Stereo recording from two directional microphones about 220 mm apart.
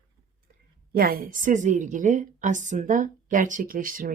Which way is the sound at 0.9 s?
40° right (ahead or behind).